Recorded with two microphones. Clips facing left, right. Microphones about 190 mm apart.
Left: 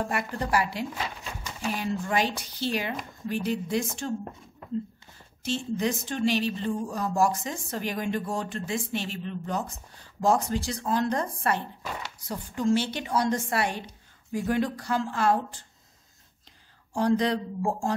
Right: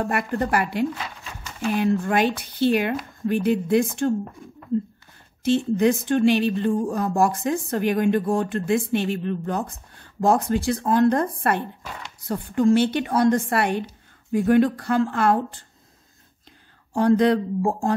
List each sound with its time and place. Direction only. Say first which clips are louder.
0.0 s speech: right 6 dB; 55° right (ahead or behind)
5.4 s speech: right 9 dB; 55° right (ahead or behind)
16.9 s speech: right 7 dB; 55° right (ahead or behind)